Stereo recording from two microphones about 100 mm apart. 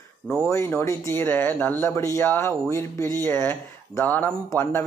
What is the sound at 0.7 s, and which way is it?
A man's voice, 25° left (ahead or behind).